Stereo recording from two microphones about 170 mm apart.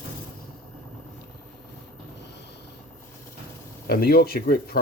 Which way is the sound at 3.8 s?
60° left (ahead or behind).